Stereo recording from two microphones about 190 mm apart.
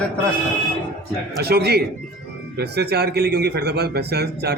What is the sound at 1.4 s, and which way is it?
Speech, 55° right (ahead or behind).